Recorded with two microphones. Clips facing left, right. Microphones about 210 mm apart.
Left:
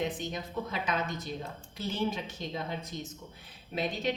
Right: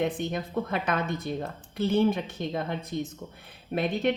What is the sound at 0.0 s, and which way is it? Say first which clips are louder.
Speech: right 6 dB; 55° right (ahead or behind).